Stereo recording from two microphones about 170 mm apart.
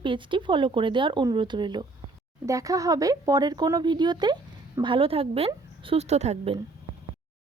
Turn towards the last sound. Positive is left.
turn(degrees=-40)  # may be behind; listen again after turning